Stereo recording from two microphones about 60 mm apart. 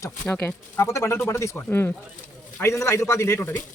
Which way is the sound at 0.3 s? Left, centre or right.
Centre.